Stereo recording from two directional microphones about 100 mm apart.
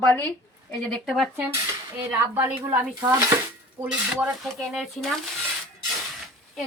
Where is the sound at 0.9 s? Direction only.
5° left (ahead or behind).